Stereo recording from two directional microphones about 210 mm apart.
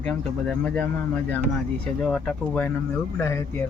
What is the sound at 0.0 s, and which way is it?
Speech, 5° left (ahead or behind).